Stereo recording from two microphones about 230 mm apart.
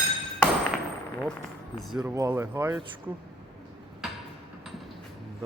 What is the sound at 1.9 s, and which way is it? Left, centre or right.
Speech, centre.